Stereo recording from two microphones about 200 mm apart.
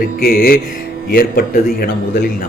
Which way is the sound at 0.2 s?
50° left (ahead or behind).